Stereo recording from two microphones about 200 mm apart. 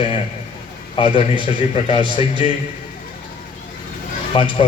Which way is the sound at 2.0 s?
25° right (ahead or behind).